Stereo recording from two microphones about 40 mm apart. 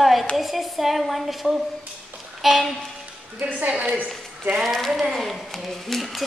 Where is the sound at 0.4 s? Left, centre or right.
Centre.